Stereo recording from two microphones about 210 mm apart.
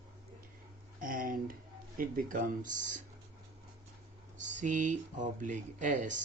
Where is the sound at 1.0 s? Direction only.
40° right (ahead or behind).